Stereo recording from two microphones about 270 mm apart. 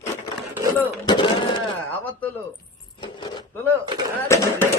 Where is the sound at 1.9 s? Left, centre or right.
Centre.